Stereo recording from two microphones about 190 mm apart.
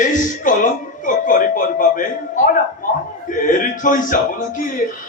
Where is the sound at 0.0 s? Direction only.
45° left (ahead or behind).